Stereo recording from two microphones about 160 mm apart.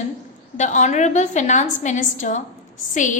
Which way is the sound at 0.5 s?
50° left (ahead or behind).